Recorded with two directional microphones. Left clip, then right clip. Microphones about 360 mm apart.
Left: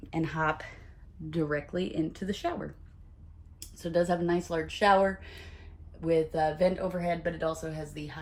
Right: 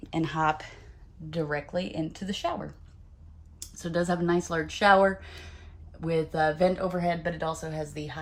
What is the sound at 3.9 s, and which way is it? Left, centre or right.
Speech, right.